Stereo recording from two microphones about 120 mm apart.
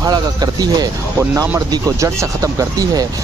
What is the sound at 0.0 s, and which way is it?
Speech, 35° right (ahead or behind).